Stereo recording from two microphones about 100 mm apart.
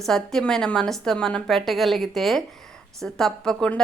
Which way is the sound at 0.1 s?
5° left (ahead or behind).